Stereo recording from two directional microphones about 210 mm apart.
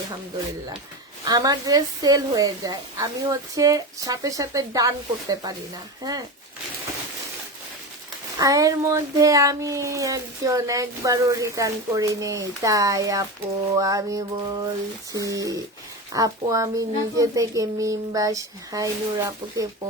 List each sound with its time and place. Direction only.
1.2 s speech: 20° right (ahead or behind)
8.4 s speech: 15° right (ahead or behind)